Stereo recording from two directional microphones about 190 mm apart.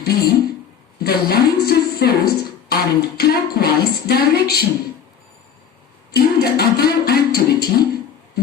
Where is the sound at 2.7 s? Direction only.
55° left (ahead or behind).